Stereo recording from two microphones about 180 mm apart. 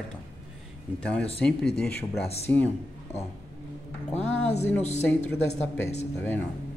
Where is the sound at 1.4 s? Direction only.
5° left (ahead or behind).